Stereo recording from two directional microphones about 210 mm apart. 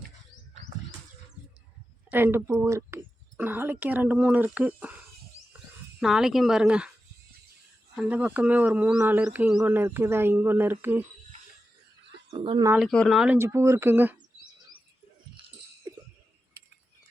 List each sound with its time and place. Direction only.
2.0 s speech: 10° right (ahead or behind)
6.0 s speech: centre (ahead or behind)
7.9 s speech: 5° right (ahead or behind)
12.3 s speech: 25° right (ahead or behind)
12.7 s speech: centre (ahead or behind)
15.4 s a sound: 25° right (ahead or behind)